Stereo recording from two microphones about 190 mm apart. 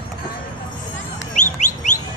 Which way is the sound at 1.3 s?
40° left (ahead or behind).